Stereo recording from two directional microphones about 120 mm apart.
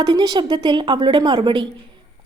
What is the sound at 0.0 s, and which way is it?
A woman's voice, 40° right (ahead or behind).